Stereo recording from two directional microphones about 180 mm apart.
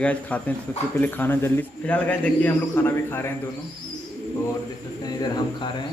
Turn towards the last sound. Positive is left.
turn(degrees=25)  # may be behind; listen again after turning